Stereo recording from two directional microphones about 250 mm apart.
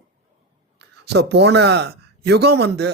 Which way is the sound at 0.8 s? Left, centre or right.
Right.